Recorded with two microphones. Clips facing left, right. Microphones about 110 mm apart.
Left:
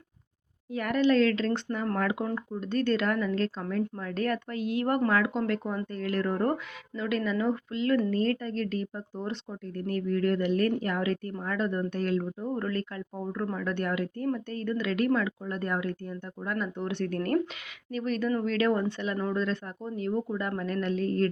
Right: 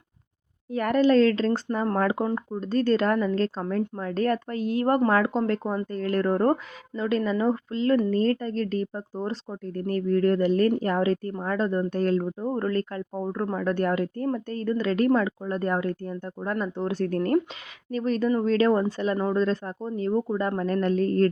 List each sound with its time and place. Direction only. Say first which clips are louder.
0.7 s a woman's voice: right 4 dB; 40° right (ahead or behind)
17.2 s speech: right 4 dB; 25° right (ahead or behind)
17.9 s a woman's voice: right 5 dB; 35° right (ahead or behind)